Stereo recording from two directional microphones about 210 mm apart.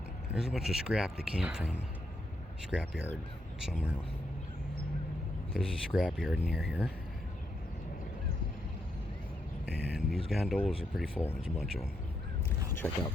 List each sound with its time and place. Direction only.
0.3 s speech: centre (ahead or behind)
5.5 s speech: centre (ahead or behind)
9.6 s speech: 5° right (ahead or behind)
12.8 s speech: 10° left (ahead or behind)